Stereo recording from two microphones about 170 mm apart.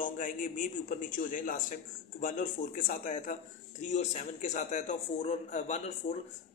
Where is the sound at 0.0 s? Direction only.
50° left (ahead or behind).